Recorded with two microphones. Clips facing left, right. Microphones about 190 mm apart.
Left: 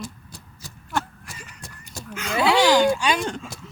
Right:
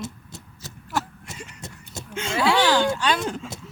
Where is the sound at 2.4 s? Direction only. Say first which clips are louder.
Left 3 dB; 15° left (ahead or behind).